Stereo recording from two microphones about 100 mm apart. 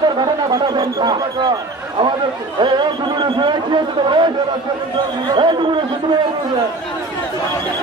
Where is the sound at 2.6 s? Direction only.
50° right (ahead or behind).